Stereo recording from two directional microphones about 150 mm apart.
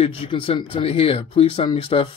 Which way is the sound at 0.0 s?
35° left (ahead or behind).